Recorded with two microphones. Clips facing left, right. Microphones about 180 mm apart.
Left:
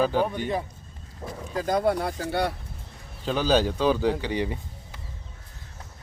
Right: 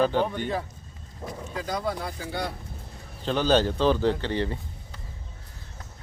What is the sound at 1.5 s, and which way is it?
Speech, 50° left (ahead or behind).